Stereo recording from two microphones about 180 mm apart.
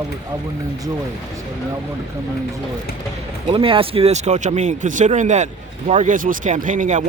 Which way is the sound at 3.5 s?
30° right (ahead or behind).